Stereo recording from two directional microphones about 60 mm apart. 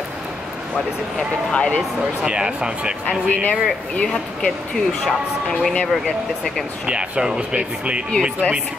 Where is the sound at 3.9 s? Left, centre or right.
Centre.